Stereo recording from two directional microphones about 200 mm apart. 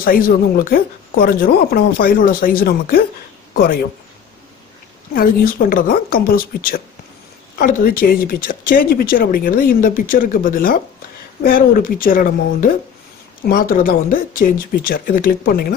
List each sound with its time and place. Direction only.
0.0 s speech: 45° left (ahead or behind)
5.1 s speech: 45° left (ahead or behind)